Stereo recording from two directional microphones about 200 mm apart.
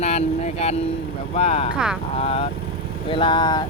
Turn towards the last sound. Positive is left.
turn(degrees=20)  # may be behind; listen again after turning